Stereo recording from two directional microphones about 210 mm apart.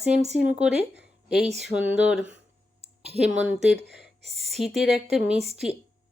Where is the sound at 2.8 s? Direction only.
30° right (ahead or behind).